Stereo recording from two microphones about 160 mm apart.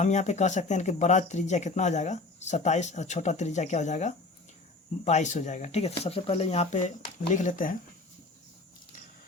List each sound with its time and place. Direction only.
0.0 s speech: 45° left (ahead or behind)